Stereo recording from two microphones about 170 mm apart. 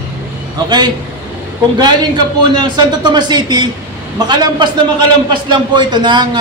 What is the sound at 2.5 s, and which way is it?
A man's voice, 25° right (ahead or behind).